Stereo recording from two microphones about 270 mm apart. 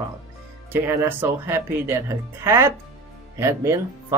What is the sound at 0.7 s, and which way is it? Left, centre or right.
Speech, centre.